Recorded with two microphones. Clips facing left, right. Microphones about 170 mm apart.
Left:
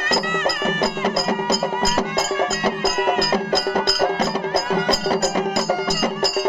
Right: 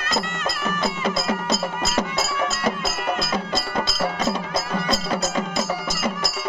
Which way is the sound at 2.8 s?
55° left (ahead or behind).